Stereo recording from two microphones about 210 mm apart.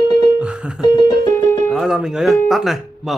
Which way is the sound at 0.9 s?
20° left (ahead or behind).